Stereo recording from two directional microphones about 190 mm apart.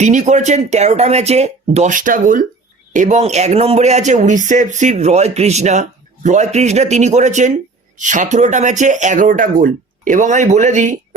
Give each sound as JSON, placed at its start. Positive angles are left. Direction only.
{"t": 0.0, "sound": "speech", "side_deg": -40}